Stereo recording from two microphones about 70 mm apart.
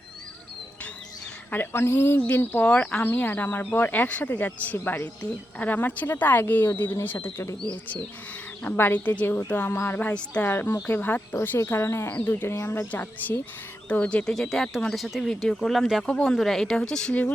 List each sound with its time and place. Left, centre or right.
1.5 s speech: left
8.7 s speech: left
10.5 s speech: left
14.3 s speech: centre
16.0 s speech: centre